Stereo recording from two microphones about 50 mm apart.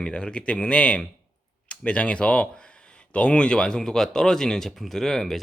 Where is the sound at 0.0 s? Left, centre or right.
Centre.